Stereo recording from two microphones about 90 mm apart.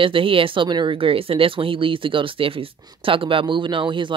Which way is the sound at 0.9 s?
90° right.